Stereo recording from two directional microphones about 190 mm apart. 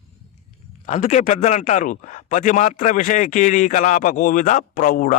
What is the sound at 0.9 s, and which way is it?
A man's voice, 40° left (ahead or behind).